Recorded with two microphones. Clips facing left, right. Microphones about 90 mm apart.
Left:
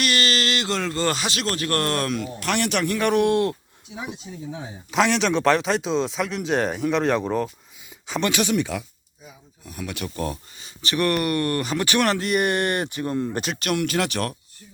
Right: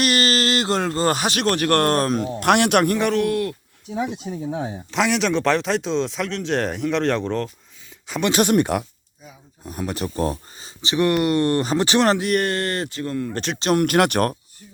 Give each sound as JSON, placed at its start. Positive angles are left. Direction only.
{"t": 0.0, "sound": "speech", "side_deg": -40}
{"t": 2.4, "sound": "speech", "side_deg": -60}
{"t": 3.1, "sound": "speech", "side_deg": 20}
{"t": 3.9, "sound": "speech", "side_deg": -55}
{"t": 4.9, "sound": "speech", "side_deg": 0}
{"t": 8.3, "sound": "speech", "side_deg": -50}
{"t": 9.6, "sound": "speech", "side_deg": -35}
{"t": 10.8, "sound": "speech", "side_deg": -20}
{"t": 12.4, "sound": "speech", "side_deg": 20}
{"t": 13.3, "sound": "speech", "side_deg": 5}
{"t": 13.7, "sound": "speech", "side_deg": -55}